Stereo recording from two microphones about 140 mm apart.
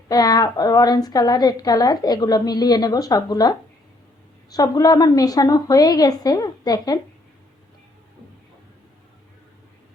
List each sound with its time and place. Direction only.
0.1 s a woman's voice: 30° left (ahead or behind)
4.5 s a woman's voice: 25° left (ahead or behind)